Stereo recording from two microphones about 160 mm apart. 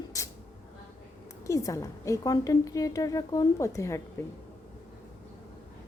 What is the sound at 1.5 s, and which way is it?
A woman's voice, 20° left (ahead or behind).